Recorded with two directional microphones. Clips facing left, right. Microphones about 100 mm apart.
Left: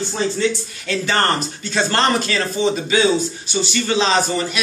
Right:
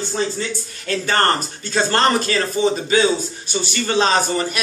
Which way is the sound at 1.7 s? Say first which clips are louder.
Right 1 dB; 35° right (ahead or behind).